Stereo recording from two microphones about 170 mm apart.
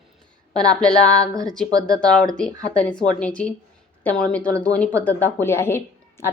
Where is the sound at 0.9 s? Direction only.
20° right (ahead or behind).